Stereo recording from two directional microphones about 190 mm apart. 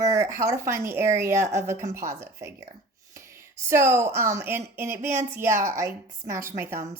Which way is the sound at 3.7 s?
15° right (ahead or behind).